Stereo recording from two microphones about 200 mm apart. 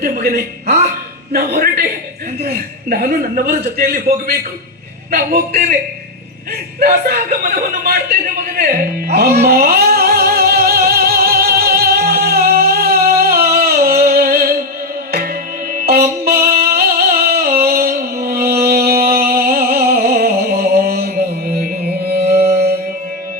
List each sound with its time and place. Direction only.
0.0 s a man's voice: 50° right (ahead or behind)
6.7 s chuckle: 50° right (ahead or behind)
15.7 s music: 45° right (ahead or behind)
16.4 s a sound: 50° right (ahead or behind)
22.3 s music: 15° right (ahead or behind)